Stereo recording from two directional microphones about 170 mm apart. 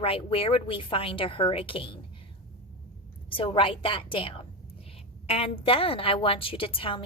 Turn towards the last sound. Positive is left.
turn(degrees=30)  # may be behind; listen again after turning